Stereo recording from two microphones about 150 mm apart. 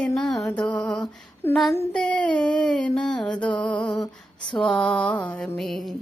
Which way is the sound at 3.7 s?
30° left (ahead or behind).